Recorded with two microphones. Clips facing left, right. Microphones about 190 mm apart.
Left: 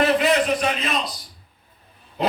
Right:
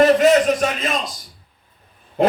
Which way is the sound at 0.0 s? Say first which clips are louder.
Right 6 dB; 45° right (ahead or behind).